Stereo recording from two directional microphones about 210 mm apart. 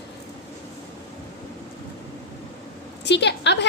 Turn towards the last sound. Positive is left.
turn(degrees=55)  # may be behind; listen again after turning